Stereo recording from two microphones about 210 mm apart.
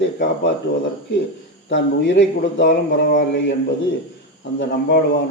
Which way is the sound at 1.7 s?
60° left (ahead or behind).